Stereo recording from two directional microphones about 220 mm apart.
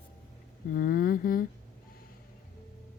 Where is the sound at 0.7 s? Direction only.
40° left (ahead or behind).